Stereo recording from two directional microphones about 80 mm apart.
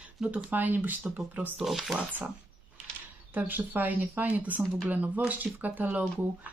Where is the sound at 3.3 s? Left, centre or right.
Right.